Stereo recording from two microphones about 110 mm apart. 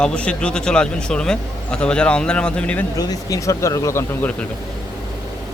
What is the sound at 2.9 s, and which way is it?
Speech, 35° left (ahead or behind).